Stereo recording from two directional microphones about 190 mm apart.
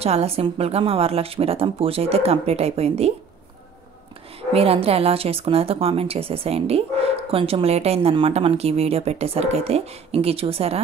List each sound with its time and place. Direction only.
0.0 s speech: 35° right (ahead or behind)
4.4 s speech: 30° right (ahead or behind)